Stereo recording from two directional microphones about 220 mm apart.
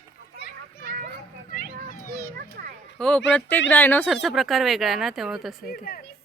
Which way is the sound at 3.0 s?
5° left (ahead or behind).